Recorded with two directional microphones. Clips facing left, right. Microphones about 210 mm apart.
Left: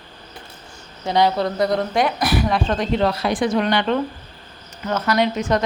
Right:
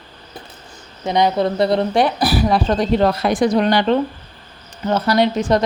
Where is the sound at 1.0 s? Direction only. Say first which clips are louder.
Right 2 dB; 20° right (ahead or behind).